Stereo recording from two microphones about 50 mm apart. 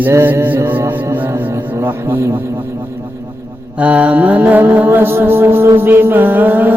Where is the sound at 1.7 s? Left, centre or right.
Right.